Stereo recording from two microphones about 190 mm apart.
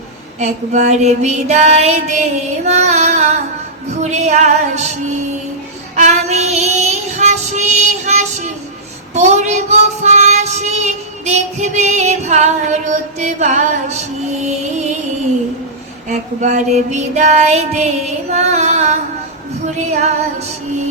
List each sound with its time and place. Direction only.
0.3 s child singing: 35° right (ahead or behind)
6.0 s child singing: 35° right (ahead or behind)
16.0 s child singing: 40° right (ahead or behind)